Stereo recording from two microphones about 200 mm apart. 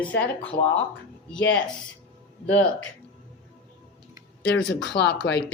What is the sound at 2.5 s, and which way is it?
Speech, 5° left (ahead or behind).